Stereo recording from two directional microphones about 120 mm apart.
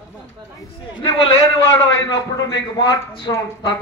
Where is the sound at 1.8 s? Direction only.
35° left (ahead or behind).